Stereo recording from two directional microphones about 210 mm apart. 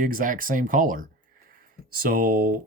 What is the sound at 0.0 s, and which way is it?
Speech, 40° right (ahead or behind).